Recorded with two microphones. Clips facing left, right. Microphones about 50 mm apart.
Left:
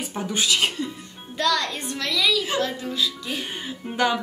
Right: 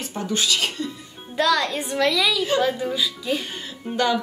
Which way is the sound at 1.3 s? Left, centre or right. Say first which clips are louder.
Right 3 dB; centre.